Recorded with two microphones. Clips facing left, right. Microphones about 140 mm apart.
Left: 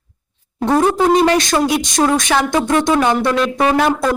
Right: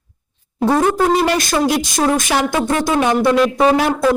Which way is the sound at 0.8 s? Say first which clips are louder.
Left 4 dB; centre (ahead or behind).